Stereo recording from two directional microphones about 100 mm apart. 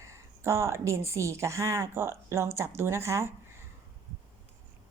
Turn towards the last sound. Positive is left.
turn(degrees=-25)  # may be behind; listen again after turning